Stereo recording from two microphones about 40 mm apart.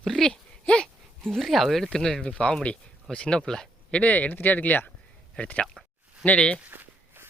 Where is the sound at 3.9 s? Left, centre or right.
Left.